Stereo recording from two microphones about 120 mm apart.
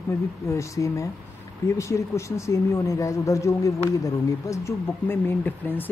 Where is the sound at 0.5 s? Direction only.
25° left (ahead or behind).